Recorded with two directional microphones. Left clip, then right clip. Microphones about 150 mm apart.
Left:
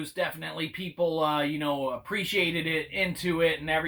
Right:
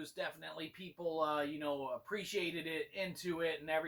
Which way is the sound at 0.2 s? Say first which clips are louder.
Left 12 dB; 20° left (ahead or behind).